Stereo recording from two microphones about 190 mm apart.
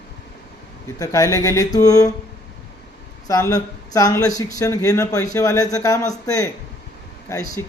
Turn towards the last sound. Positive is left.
turn(degrees=15)  # may be behind; listen again after turning